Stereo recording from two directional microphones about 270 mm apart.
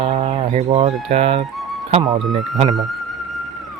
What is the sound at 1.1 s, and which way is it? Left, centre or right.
Speech, right.